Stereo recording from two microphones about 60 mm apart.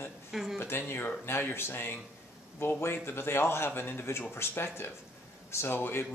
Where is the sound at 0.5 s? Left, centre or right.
Left.